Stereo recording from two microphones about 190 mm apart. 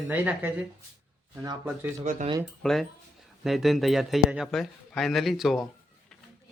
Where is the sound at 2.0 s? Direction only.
40° right (ahead or behind).